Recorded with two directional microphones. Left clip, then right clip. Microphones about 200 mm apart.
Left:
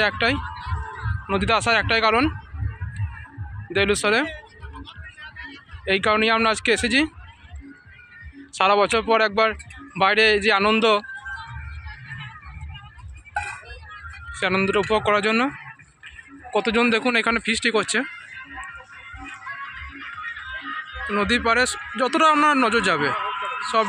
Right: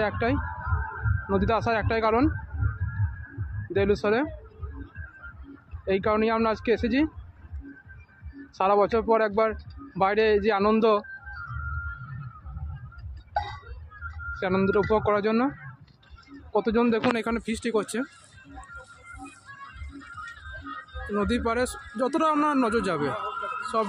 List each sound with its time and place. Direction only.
0.0 s a man's voice: centre (ahead or behind)
3.7 s a man's voice: centre (ahead or behind)
5.9 s a man's voice: 5° left (ahead or behind)
8.5 s a man's voice: centre (ahead or behind)
14.4 s a man's voice: centre (ahead or behind)
16.5 s a man's voice: 10° left (ahead or behind)
19.1 s music: 60° right (ahead or behind)
21.2 s a man's voice: centre (ahead or behind)
23.1 s a sound: 60° right (ahead or behind)